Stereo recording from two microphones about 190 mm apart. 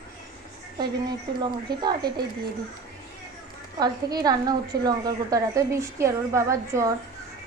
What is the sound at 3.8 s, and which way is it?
A woman's voice, 20° right (ahead or behind).